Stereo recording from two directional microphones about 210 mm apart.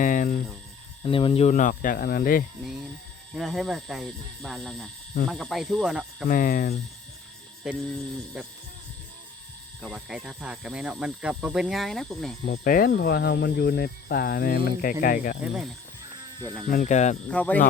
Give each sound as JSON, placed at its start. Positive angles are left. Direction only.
{"t": 0.0, "sound": "cricket", "side_deg": 40}
{"t": 1.0, "sound": "speech", "side_deg": 25}
{"t": 3.3, "sound": "speech", "side_deg": 0}
{"t": 6.2, "sound": "speech", "side_deg": 40}
{"t": 7.6, "sound": "speech", "side_deg": -5}
{"t": 9.8, "sound": "speech", "side_deg": 0}
{"t": 12.5, "sound": "speech", "side_deg": 40}
{"t": 16.6, "sound": "speech", "side_deg": 35}
{"t": 17.3, "sound": "speech", "side_deg": 5}